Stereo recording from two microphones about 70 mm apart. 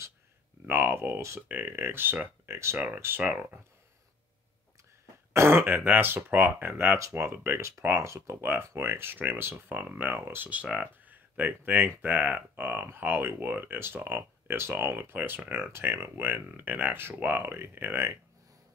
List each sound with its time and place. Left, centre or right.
0.7 s speech: right
5.3 s speech: right
8.4 s speech: right
10.5 s speech: centre